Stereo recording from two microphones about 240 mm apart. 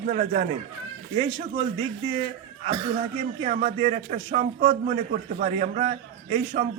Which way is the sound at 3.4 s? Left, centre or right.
Right.